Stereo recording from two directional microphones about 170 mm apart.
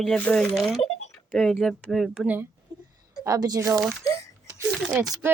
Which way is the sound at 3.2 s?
20° right (ahead or behind).